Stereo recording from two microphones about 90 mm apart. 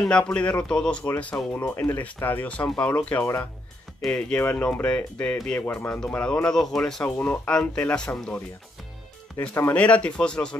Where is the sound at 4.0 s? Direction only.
10° left (ahead or behind).